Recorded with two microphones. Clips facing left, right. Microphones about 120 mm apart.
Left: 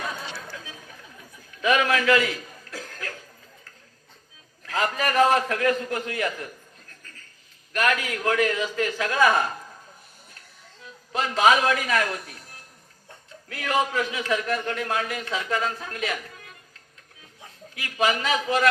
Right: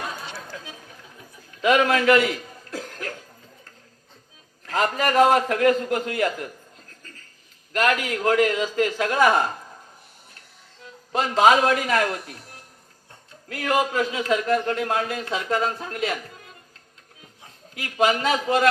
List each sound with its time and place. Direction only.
1.7 s chuckle: 30° right (ahead or behind)
4.6 s a man's voice: 30° right (ahead or behind)
7.7 s a man's voice: 30° right (ahead or behind)
11.1 s a man's voice: 35° right (ahead or behind)
13.5 s a man's voice: 35° right (ahead or behind)
17.7 s a man's voice: 30° right (ahead or behind)